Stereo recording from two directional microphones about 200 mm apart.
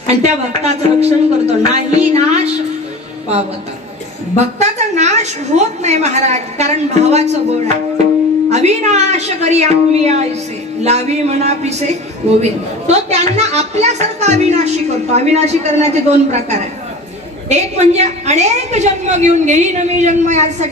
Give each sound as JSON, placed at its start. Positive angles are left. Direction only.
{"t": 0.0, "sound": "a man's voice", "side_deg": -35}
{"t": 4.6, "sound": "a man's voice", "side_deg": -35}
{"t": 8.5, "sound": "a man's voice", "side_deg": -35}